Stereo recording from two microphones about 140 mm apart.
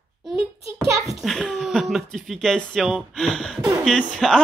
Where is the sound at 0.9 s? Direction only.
25° right (ahead or behind).